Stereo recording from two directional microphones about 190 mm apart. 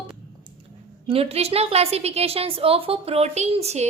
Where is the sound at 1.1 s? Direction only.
30° right (ahead or behind).